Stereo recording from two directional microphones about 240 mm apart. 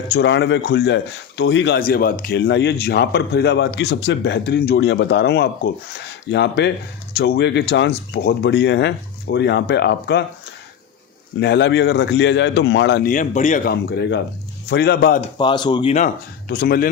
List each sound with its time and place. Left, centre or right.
0.1 s speech: left
11.3 s speech: left
13.1 s a man's voice: left
13.9 s a man's voice: left
15.4 s speech: centre
16.5 s a man's voice: left